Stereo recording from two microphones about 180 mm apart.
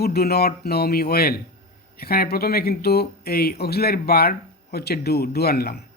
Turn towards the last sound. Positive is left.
turn(degrees=60)  # may be behind; listen again after turning